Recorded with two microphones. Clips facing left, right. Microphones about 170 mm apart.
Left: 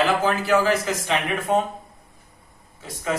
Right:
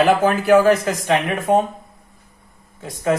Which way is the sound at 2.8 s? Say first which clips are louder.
Right 7 dB; 50° right (ahead or behind).